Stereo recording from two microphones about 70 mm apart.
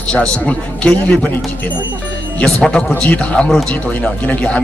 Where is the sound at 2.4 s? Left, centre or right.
Centre.